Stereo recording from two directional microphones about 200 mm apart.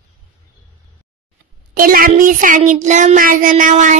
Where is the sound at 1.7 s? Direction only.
45° right (ahead or behind).